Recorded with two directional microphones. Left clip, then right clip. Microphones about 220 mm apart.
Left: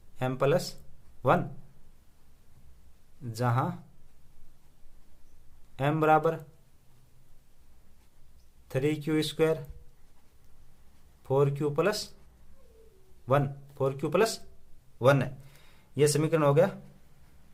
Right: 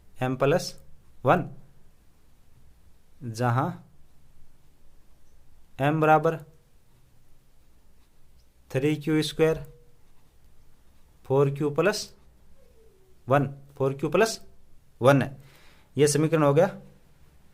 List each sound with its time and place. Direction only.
0.2 s a man's voice: 25° right (ahead or behind)
3.2 s a man's voice: 25° right (ahead or behind)
5.7 s a man's voice: 25° right (ahead or behind)
8.6 s a man's voice: 25° right (ahead or behind)
11.2 s a man's voice: 25° right (ahead or behind)
13.2 s a man's voice: 25° right (ahead or behind)